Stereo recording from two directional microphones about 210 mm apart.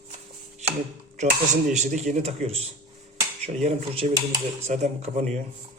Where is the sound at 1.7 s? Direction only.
35° right (ahead or behind).